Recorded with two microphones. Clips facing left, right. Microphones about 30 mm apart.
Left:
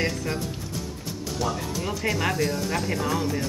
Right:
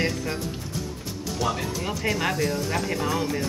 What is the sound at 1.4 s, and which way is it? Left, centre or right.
Speech, centre.